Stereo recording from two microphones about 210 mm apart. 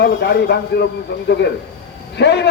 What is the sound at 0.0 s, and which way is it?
Speech, 50° left (ahead or behind).